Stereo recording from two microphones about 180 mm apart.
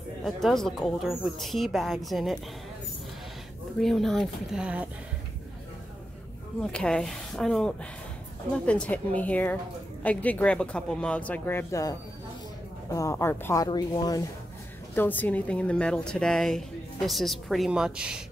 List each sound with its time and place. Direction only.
0.2 s a woman's voice: centre (ahead or behind)
3.8 s a woman's voice: centre (ahead or behind)
6.6 s a woman's voice: 5° left (ahead or behind)
12.9 s speech: 15° left (ahead or behind)
15.0 s a woman's voice: 10° left (ahead or behind)